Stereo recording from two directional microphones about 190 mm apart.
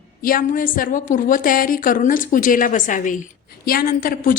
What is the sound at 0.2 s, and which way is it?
A woman's voice, 45° left (ahead or behind).